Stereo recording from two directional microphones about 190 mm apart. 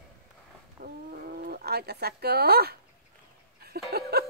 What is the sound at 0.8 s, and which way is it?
Bird, 50° right (ahead or behind).